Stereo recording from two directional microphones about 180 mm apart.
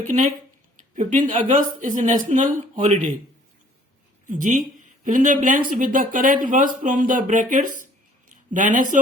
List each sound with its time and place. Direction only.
0.9 s speech: 45° right (ahead or behind)
4.3 s speech: 45° right (ahead or behind)